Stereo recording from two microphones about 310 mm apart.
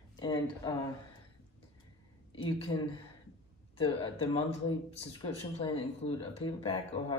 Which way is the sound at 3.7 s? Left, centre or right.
Centre.